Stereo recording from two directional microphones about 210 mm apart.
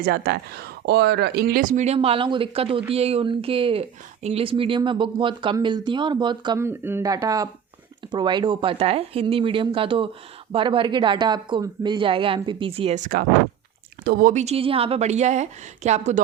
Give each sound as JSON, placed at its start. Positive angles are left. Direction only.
{"t": 0.0, "sound": "speech", "side_deg": -50}